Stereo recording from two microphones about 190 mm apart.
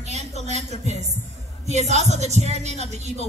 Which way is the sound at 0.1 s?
35° right (ahead or behind).